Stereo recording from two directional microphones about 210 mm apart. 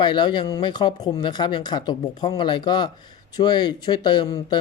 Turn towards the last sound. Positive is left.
turn(degrees=20)  # may be behind; listen again after turning